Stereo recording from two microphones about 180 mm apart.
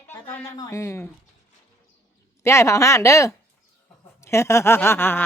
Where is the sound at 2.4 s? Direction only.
15° left (ahead or behind).